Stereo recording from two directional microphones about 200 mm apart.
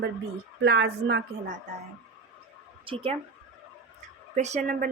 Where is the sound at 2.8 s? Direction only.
25° right (ahead or behind).